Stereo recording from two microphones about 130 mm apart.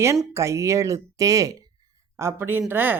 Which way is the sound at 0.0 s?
20° right (ahead or behind).